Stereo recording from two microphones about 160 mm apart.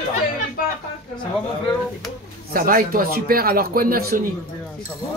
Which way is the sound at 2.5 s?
60° right (ahead or behind).